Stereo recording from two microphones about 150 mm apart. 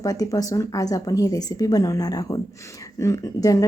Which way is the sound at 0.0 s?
25° left (ahead or behind).